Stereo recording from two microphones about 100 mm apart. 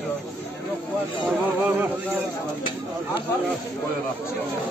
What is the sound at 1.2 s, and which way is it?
Speech, 20° right (ahead or behind).